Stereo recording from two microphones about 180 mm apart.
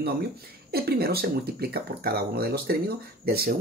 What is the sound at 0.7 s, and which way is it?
Speech, 60° right (ahead or behind).